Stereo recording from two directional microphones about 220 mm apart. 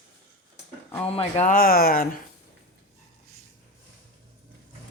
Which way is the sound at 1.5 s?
40° left (ahead or behind).